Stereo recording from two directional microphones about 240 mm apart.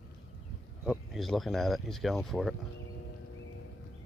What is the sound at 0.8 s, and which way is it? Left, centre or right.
Speech, centre.